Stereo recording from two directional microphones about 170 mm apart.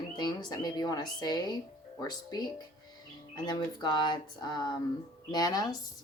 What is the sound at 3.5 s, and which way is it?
A woman's voice, 25° left (ahead or behind).